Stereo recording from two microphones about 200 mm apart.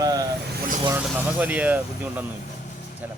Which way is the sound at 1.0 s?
5° right (ahead or behind).